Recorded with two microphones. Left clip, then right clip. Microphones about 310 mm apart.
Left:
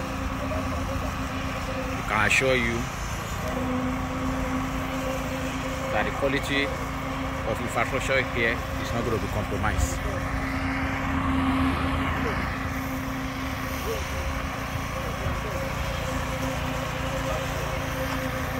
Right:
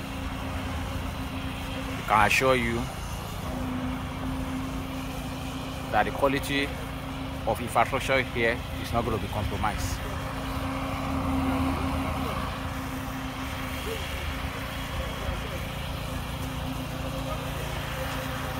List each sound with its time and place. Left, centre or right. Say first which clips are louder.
2.0 s speech: right 1 dB; centre
5.9 s speech: right 2 dB; centre
7.7 s speech: right 1 dB; centre
11.5 s vehicle: left 3 dB; right